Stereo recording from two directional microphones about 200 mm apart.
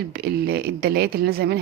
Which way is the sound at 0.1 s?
55° right (ahead or behind).